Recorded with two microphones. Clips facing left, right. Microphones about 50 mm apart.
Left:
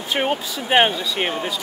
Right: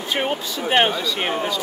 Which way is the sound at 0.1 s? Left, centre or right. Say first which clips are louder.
Left 2 dB; centre.